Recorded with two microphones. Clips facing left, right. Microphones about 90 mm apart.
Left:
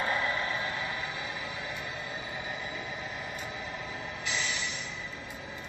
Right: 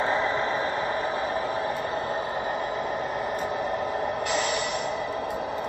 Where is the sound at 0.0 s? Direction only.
30° right (ahead or behind); by 2.5 s 50° right (ahead or behind).